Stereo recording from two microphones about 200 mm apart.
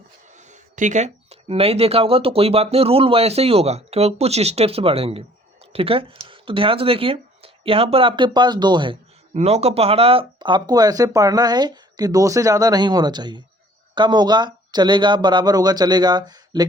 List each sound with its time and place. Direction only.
0.3 s speech: 35° right (ahead or behind); by 16.6 s 20° right (ahead or behind)